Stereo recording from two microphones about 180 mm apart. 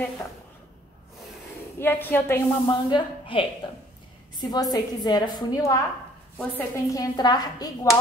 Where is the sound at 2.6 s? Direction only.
25° left (ahead or behind).